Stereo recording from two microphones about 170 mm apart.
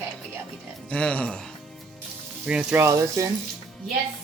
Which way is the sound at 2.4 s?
5° right (ahead or behind).